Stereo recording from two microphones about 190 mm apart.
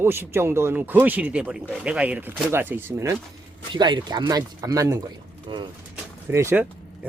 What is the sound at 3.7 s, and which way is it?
Speech, 25° right (ahead or behind).